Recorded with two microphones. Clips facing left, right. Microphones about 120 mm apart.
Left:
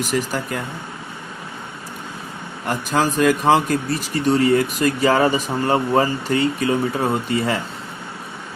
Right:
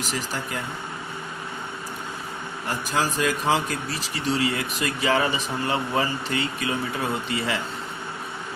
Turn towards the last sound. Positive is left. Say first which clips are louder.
# left 6 dB
turn(degrees=40)  # may be behind; listen again after turning